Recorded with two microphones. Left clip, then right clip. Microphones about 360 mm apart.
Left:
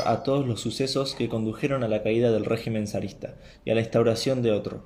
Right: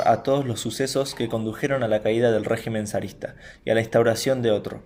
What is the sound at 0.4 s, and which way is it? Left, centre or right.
Speech, centre.